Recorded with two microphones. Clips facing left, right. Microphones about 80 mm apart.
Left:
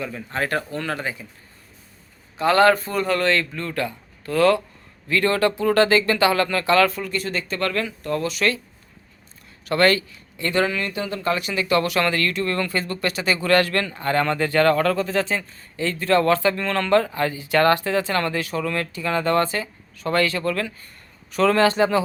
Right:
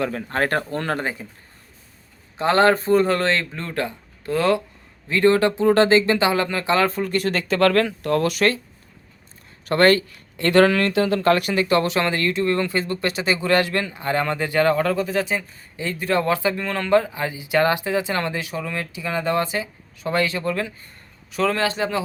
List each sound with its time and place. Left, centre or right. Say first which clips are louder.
0.0 s speech: right 4 dB; right
2.4 s speech: left 1 dB; right
7.1 s speech: right 5 dB; right
9.6 s speech: right 2 dB; right
10.1 s speech: right 6 dB; right
11.5 s speech: right 1 dB; right; by 20.7 s centre
21.3 s a man's voice: left 4 dB; centre